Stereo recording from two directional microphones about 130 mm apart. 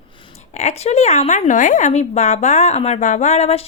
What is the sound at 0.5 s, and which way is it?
A woman's voice, 60° left (ahead or behind).